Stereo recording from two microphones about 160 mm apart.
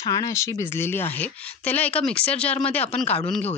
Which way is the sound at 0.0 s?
20° left (ahead or behind).